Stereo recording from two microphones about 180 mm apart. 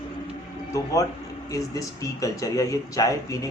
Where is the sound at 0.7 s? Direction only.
20° left (ahead or behind).